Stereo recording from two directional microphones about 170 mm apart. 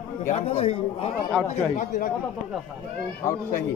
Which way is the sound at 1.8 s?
50° left (ahead or behind).